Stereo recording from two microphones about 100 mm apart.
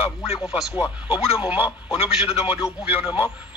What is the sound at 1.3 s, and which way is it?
Speech, 15° right (ahead or behind).